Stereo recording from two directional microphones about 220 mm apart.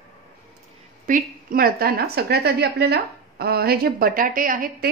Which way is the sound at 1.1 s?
40° right (ahead or behind).